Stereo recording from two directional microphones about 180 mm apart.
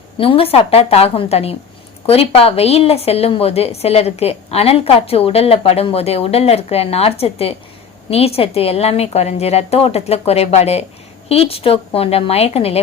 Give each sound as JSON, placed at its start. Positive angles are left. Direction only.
{"t": 0.2, "sound": "speech", "side_deg": 30}